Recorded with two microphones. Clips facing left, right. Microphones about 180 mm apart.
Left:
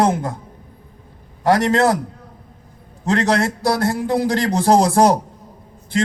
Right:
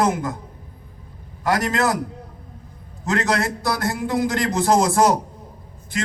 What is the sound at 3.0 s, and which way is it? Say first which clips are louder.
A man's voice: left 4 dB; 30° left (ahead or behind).